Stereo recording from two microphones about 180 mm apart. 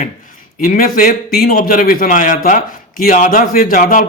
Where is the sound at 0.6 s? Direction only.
50° left (ahead or behind).